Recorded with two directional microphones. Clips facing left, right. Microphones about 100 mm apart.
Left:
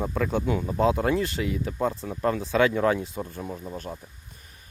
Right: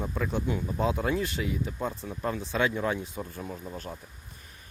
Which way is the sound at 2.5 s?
90° left.